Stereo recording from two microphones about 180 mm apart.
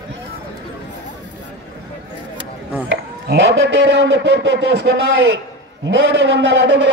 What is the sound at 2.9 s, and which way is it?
A man's voice, 75° right (ahead or behind).